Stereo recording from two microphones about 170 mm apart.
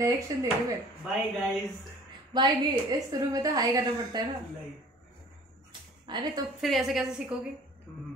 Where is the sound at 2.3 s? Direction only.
25° right (ahead or behind).